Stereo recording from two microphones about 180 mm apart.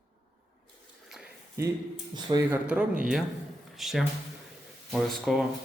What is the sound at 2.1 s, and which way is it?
Speech, 25° right (ahead or behind).